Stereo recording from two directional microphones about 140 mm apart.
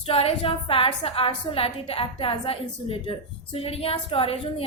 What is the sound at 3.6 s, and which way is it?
Speech, 45° left (ahead or behind).